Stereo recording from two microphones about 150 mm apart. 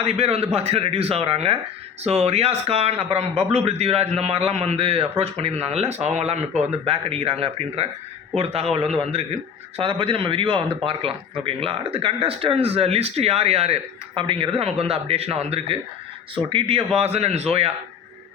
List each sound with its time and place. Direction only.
0.0 s a man's voice: 40° right (ahead or behind)